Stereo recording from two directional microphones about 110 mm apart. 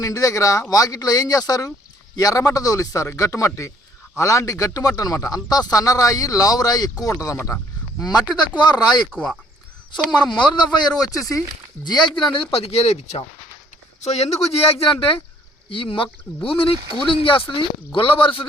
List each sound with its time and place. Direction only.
0.0 s speech: 30° left (ahead or behind)
9.1 s speech: 10° left (ahead or behind)
10.1 s speech: 40° left (ahead or behind); by 14.3 s 85° left
14.5 s speech: 60° left (ahead or behind)
16.7 s speech: 45° right (ahead or behind)
17.2 s speech: 55° left (ahead or behind)